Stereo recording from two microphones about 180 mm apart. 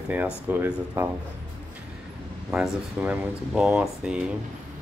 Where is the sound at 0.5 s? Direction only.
10° right (ahead or behind).